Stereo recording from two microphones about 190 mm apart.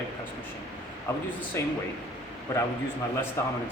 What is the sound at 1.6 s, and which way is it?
Speech, 15° left (ahead or behind).